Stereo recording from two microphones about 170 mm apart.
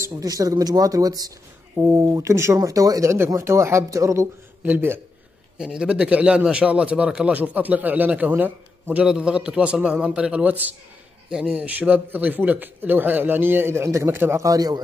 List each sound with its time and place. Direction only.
0.1 s speech: 20° right (ahead or behind)